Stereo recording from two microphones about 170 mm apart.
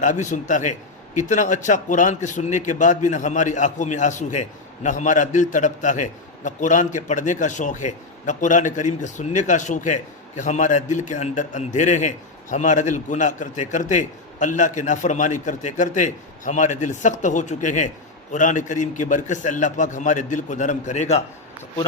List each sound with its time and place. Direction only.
0.0 s a man's voice: 45° left (ahead or behind)